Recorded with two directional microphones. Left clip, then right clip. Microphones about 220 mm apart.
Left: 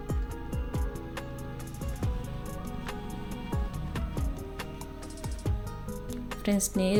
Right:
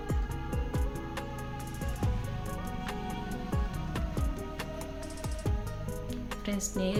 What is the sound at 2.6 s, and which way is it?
Music, centre (ahead or behind).